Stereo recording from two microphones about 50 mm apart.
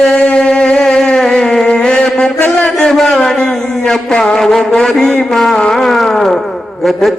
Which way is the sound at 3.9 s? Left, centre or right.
Centre.